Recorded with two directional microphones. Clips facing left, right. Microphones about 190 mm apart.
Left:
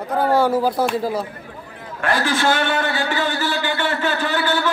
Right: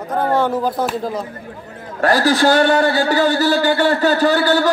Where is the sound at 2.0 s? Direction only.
40° right (ahead or behind).